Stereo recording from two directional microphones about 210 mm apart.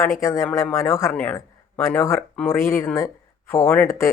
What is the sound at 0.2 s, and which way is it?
A man's voice, 15° left (ahead or behind).